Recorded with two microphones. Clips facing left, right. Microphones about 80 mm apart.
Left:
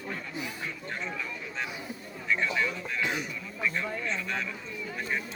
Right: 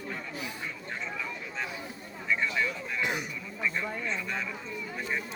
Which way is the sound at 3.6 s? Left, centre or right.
Centre.